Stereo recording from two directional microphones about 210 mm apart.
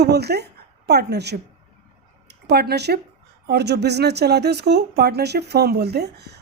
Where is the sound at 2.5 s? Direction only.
50° right (ahead or behind).